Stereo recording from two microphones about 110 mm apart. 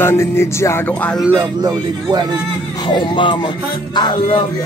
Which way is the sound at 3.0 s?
45° left (ahead or behind).